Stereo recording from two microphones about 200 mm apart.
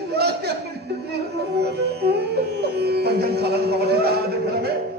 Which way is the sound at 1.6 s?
55° right (ahead or behind).